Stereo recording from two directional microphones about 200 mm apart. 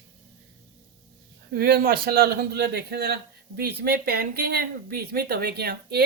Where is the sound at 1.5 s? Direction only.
50° right (ahead or behind).